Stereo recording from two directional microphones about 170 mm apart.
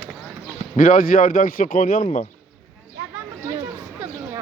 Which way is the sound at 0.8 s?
55° left (ahead or behind).